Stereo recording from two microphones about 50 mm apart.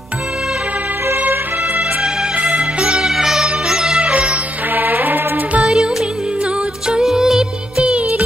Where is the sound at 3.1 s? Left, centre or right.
Centre; by 4.5 s right.